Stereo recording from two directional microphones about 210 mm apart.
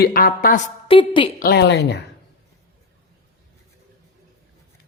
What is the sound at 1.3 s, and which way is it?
Speech, 50° left (ahead or behind).